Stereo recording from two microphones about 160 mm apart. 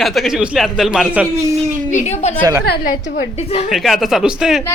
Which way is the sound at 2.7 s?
90° left.